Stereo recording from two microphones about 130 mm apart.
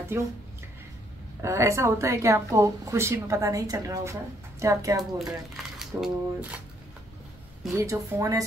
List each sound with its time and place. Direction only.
0.1 s speech: 15° right (ahead or behind)
1.4 s speech: 25° right (ahead or behind)
5.8 s a sound: 5° right (ahead or behind)
7.7 s speech: 25° right (ahead or behind)